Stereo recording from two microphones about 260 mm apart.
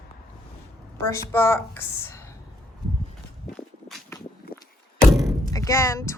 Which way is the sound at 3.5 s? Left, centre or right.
Centre.